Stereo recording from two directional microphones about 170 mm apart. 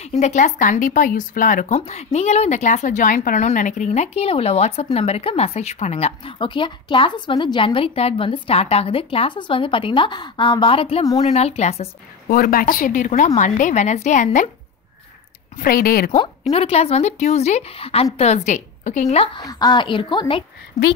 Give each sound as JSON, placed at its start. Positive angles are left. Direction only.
{"t": 0.0, "sound": "speech", "side_deg": 40}
{"t": 12.3, "sound": "a woman's voice", "side_deg": 60}
{"t": 15.5, "sound": "speech", "side_deg": 60}
{"t": 16.2, "sound": "speech", "side_deg": 35}
{"t": 19.3, "sound": "speech", "side_deg": 25}